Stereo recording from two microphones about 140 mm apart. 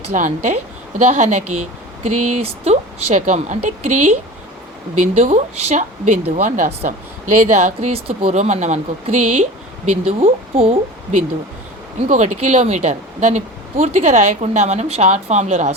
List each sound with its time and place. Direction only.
0.1 s speech: 60° right (ahead or behind)
5.1 s speech: 50° right (ahead or behind)
11.9 s speech: 60° right (ahead or behind)